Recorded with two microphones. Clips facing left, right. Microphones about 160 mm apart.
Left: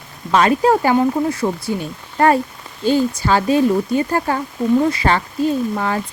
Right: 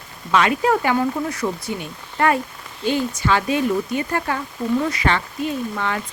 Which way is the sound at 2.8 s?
35° left (ahead or behind).